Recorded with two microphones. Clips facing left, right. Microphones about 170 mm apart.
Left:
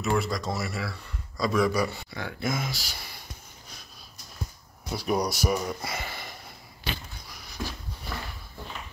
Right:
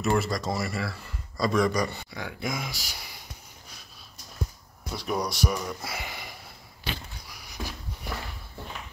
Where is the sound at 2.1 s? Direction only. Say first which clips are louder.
Left 2 dB; 10° right (ahead or behind).